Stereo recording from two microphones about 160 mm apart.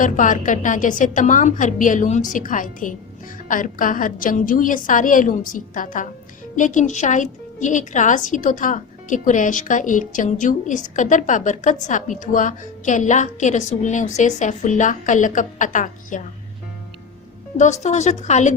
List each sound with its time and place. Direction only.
0.0 s a woman's voice: 55° left (ahead or behind)
17.6 s a woman's voice: 45° left (ahead or behind)